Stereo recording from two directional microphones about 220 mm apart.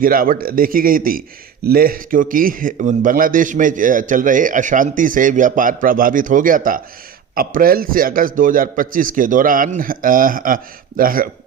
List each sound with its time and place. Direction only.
0.0 s a man's voice: 40° right (ahead or behind)